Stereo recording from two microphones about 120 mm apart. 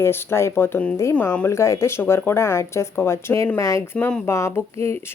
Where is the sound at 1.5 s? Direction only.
25° left (ahead or behind).